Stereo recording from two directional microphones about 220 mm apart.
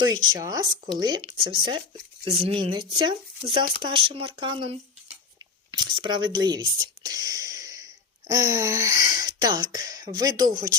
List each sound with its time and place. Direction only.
0.3 s speech: 15° right (ahead or behind)